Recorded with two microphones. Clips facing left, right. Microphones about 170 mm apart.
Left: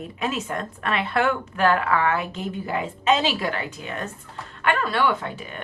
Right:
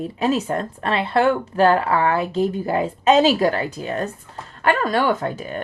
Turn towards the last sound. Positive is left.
turn(degrees=-40)  # may be behind; listen again after turning